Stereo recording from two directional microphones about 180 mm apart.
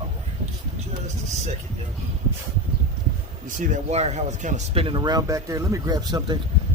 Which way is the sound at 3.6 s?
40° right (ahead or behind).